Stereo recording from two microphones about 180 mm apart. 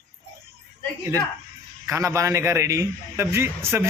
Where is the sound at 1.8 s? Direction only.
15° right (ahead or behind).